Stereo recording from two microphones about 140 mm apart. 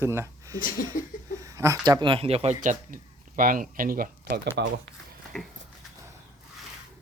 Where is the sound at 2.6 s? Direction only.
70° right (ahead or behind).